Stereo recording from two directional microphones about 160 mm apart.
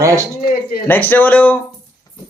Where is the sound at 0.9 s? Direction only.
10° left (ahead or behind).